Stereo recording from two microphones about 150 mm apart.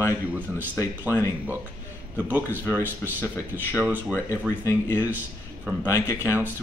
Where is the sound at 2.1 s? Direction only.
10° right (ahead or behind).